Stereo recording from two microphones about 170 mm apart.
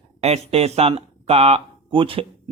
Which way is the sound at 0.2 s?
40° right (ahead or behind).